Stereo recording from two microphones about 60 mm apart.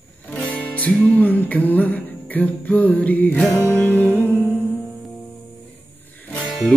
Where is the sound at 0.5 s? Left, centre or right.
Left.